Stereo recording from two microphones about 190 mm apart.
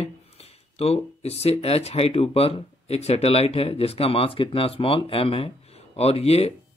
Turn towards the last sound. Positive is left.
turn(degrees=30)  # may be behind; listen again after turning